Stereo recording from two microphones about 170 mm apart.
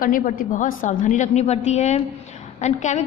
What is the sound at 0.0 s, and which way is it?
A woman's voice, 55° left (ahead or behind).